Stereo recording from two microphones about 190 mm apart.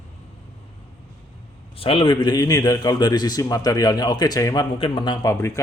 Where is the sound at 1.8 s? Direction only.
25° left (ahead or behind).